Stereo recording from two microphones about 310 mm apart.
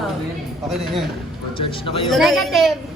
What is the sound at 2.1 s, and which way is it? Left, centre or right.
Speech, centre.